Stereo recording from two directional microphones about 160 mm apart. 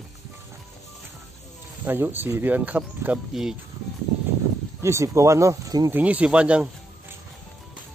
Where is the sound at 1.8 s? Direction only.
15° right (ahead or behind).